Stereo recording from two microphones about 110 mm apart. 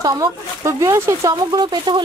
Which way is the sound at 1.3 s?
40° right (ahead or behind).